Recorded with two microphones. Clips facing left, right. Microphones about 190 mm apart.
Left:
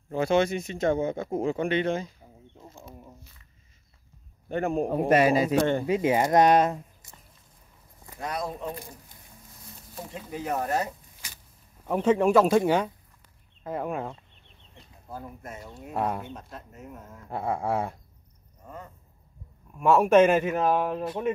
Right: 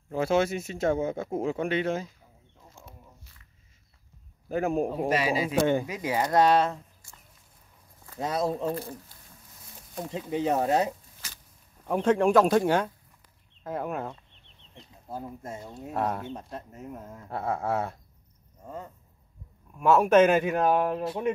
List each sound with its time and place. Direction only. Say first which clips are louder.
0.1 s speech: left 1 dB; 5° right (ahead or behind)
2.6 s a sound: left 7 dB; 25° left (ahead or behind)
4.5 s speech: even; centre (ahead or behind)
4.8 s a man's voice: left 5 dB; 55° left (ahead or behind)
5.5 s speech: left 1 dB; 5° right (ahead or behind)
5.9 s speech: left 5 dB; 25° left (ahead or behind)
8.2 s speech: right 5 dB; 25° right (ahead or behind)
8.7 s speech: right 7 dB; 15° left (ahead or behind)
10.1 s speech: right 5 dB; 20° right (ahead or behind)
11.8 s speech: left 1 dB; 5° left (ahead or behind)
15.0 s speech: right 3 dB; 25° right (ahead or behind)
15.9 s speech: left 1 dB; 5° left (ahead or behind)
17.3 s speech: left 1 dB; centre (ahead or behind)
19.8 s speech: left 1 dB; centre (ahead or behind)